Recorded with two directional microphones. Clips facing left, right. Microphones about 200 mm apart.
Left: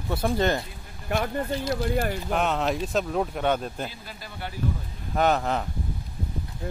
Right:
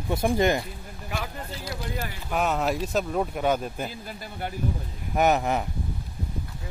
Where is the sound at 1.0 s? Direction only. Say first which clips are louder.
Left 6 dB; 55° left (ahead or behind).